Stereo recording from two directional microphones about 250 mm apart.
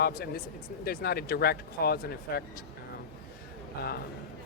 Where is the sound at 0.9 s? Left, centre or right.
Left.